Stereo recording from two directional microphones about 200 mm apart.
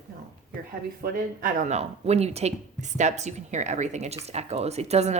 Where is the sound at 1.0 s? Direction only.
45° right (ahead or behind).